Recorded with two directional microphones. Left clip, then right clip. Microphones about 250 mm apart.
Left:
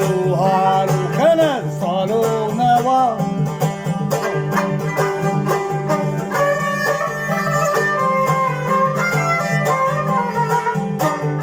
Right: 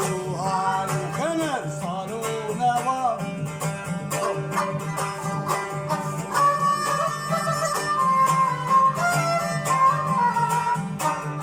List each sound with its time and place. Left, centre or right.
0.4 s music: left
2.6 s music: left